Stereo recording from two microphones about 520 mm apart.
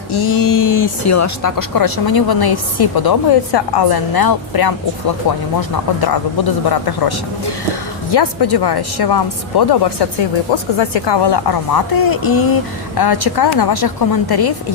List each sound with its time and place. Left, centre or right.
0.1 s speech: left
8.1 s speech: left